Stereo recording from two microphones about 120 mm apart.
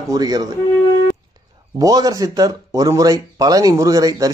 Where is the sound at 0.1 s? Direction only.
30° right (ahead or behind).